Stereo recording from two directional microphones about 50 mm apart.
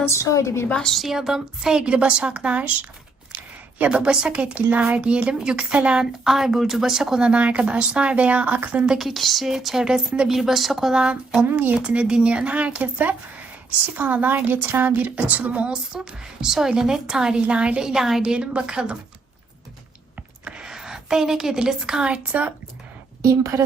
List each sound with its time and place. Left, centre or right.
0.1 s a woman's voice: left
0.7 s a woman's voice: centre
0.9 s a woman's voice: centre; by 2.7 s right
3.8 s speech: right
6.2 s speech: centre; by 8.8 s right
9.0 s a woman's voice: centre
10.2 s a woman's voice: centre
11.0 s a woman's voice: centre
15.9 s a woman's voice: centre
18.2 s speech: right
20.4 s a woman's voice: centre
23.2 s a woman's voice: right